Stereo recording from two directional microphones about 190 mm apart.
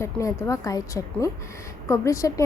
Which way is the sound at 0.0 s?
15° left (ahead or behind).